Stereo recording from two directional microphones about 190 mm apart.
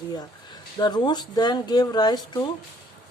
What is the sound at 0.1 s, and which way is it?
A woman's voice, 20° left (ahead or behind).